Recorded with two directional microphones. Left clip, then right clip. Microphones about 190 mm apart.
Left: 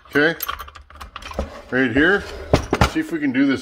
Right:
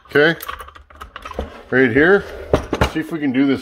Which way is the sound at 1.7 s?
35° right (ahead or behind).